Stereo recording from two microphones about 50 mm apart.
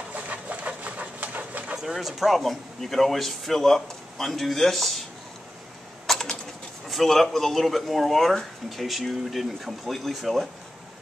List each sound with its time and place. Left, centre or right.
0.1 s bird: right
1.8 s speech: centre
6.1 s typing: centre
6.9 s speech: centre